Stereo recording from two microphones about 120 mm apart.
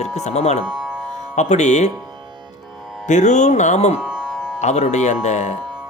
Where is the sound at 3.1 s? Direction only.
90° left; by 4.0 s 65° left (ahead or behind).